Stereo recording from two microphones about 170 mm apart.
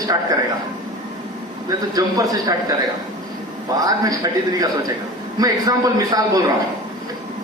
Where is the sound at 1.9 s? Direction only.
20° right (ahead or behind).